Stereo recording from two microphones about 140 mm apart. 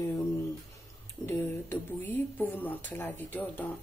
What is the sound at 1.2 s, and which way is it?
Speech, 15° left (ahead or behind).